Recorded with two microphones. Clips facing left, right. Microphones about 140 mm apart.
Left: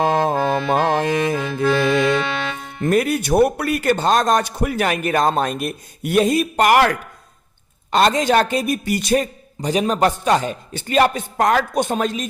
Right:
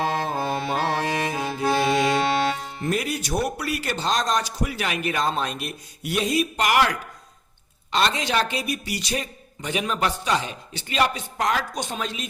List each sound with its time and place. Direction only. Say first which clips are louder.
0.0 s music: left 7 dB; 50° left (ahead or behind)
1.8 s accordion: left 2 dB; 55° left (ahead or behind)
2.8 s a man's voice: left 9 dB; 55° left (ahead or behind)